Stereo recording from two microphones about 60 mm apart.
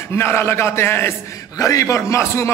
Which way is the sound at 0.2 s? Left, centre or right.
Left.